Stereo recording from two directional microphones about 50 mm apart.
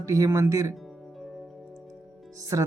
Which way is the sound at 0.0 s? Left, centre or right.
Right.